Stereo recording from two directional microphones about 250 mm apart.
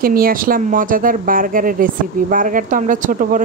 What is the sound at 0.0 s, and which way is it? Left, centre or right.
Speech, right.